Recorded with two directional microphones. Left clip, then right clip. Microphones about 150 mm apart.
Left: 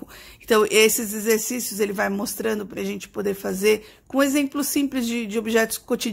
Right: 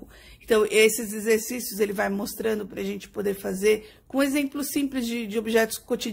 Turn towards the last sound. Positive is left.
turn(degrees=15)  # may be behind; listen again after turning